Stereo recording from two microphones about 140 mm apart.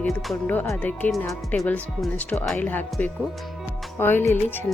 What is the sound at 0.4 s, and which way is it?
Speech, 15° left (ahead or behind).